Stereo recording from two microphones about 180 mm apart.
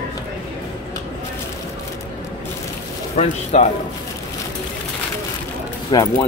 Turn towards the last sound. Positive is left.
turn(degrees=20)  # may be behind; listen again after turning